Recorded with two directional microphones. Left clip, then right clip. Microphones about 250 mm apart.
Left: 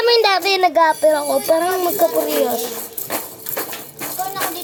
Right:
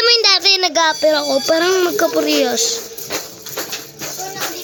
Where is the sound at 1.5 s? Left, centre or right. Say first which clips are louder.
Right 3 dB; right.